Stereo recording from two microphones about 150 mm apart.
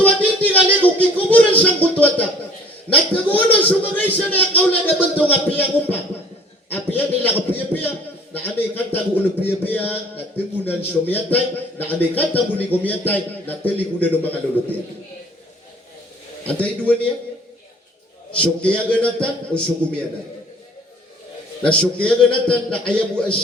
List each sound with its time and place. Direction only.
0.0 s a sound: 10° left (ahead or behind)
2.9 s a man's voice: 10° left (ahead or behind)
8.3 s a man's voice: 10° left (ahead or behind)
16.5 s a man's voice: 10° left (ahead or behind)
18.3 s a man's voice: 10° left (ahead or behind)
21.6 s a man's voice: 5° left (ahead or behind)